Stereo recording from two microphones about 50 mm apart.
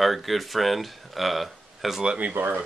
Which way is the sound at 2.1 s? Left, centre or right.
Right.